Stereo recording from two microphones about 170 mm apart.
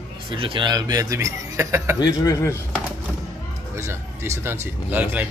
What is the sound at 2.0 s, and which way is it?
Speech, 20° left (ahead or behind).